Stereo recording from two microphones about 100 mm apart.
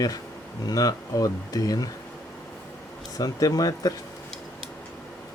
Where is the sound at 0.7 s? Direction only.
40° left (ahead or behind).